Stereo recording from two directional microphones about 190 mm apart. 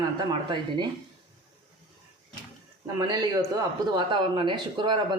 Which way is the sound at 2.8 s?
20° right (ahead or behind).